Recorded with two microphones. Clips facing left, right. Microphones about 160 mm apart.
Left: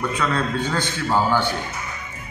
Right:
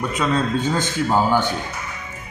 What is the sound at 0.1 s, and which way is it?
A man's voice, 20° right (ahead or behind).